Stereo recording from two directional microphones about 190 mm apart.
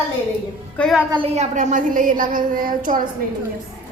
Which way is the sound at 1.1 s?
30° right (ahead or behind).